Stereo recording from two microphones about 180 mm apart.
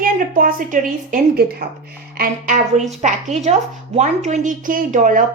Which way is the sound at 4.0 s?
40° right (ahead or behind).